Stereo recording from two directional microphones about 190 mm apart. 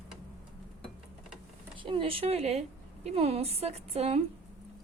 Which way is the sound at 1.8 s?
25° right (ahead or behind).